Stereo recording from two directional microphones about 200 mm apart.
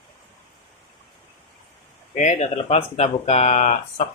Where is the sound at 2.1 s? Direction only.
35° left (ahead or behind).